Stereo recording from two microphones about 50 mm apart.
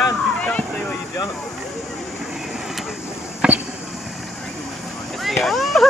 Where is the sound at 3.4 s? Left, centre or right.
Right.